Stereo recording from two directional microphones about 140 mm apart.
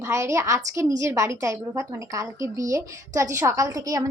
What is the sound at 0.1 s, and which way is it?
A woman's voice, 20° right (ahead or behind).